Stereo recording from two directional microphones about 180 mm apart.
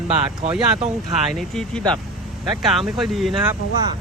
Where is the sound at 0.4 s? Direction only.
40° right (ahead or behind).